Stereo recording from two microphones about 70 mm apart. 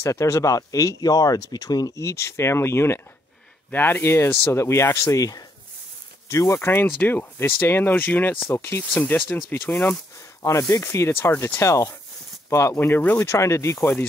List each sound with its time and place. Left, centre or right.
0.0 s speech: left
2.0 s speech: left
10.4 s speech: left